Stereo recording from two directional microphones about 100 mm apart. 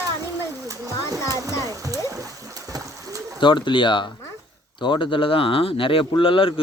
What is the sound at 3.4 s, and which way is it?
Speech, 50° left (ahead or behind).